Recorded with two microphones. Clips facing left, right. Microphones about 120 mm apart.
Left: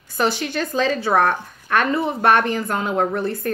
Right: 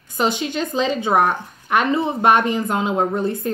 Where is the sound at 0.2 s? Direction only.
20° right (ahead or behind).